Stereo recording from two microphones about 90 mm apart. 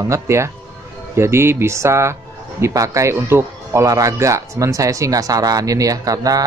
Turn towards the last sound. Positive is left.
turn(degrees=-40)  # may be behind; listen again after turning